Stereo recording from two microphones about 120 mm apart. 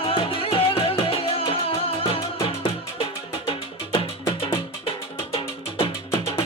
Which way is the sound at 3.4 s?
50° left (ahead or behind).